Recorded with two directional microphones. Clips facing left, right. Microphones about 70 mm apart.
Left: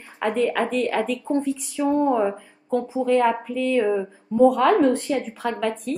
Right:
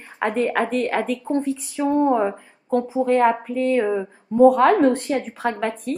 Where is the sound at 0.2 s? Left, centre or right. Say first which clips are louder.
Right 1 dB; right.